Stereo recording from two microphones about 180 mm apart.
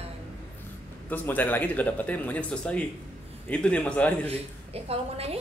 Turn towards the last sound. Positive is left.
turn(degrees=-35)  # may be behind; listen again after turning